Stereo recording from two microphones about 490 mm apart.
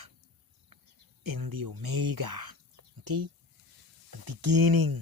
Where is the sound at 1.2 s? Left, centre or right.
Right.